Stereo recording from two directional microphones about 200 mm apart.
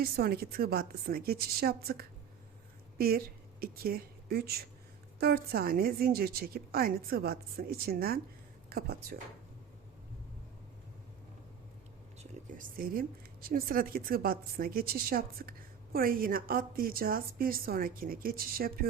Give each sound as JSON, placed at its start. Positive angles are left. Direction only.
{"t": 0.0, "sound": "a woman's voice", "side_deg": -50}
{"t": 12.2, "sound": "speech", "side_deg": -45}